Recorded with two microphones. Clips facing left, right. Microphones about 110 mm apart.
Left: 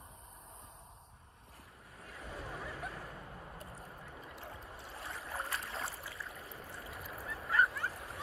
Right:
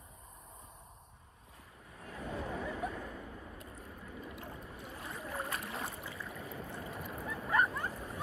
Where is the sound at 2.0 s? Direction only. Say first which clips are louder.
Right 6 dB; 25° right (ahead or behind).